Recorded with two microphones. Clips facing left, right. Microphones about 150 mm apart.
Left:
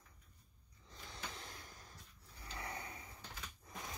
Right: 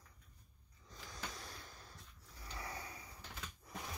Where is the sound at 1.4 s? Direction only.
15° left (ahead or behind).